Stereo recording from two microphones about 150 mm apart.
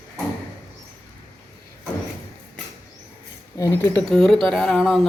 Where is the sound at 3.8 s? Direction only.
10° left (ahead or behind).